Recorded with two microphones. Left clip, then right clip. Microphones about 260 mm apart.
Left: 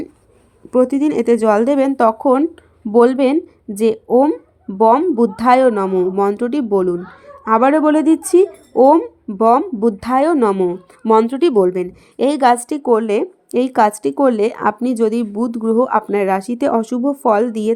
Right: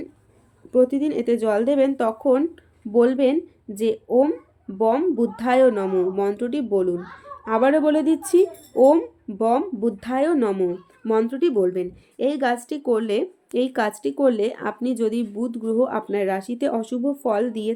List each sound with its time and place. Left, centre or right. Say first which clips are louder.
0.7 s speech: left 5 dB; left